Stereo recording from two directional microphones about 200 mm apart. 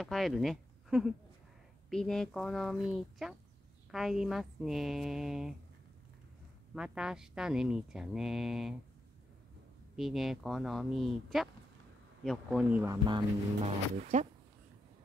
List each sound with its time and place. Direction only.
0.0 s speech: centre (ahead or behind)
6.7 s speech: 5° right (ahead or behind)
9.9 s speech: centre (ahead or behind)
12.9 s speech: 20° right (ahead or behind)
13.7 s speech: 35° right (ahead or behind)